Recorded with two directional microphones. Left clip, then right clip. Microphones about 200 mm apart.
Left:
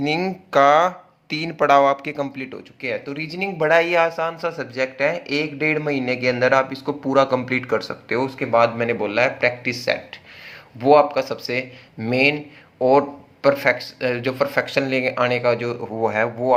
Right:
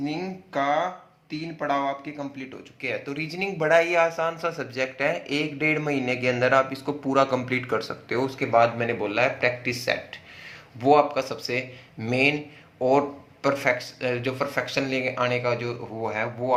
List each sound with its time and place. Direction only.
0.0 s speech: 45° left (ahead or behind)
2.8 s speech: 15° left (ahead or behind)